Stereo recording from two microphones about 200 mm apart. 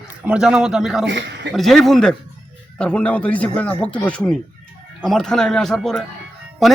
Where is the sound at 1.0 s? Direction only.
60° right (ahead or behind).